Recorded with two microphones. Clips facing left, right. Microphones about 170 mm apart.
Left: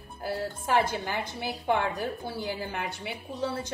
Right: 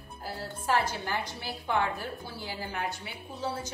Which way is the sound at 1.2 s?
55° left (ahead or behind).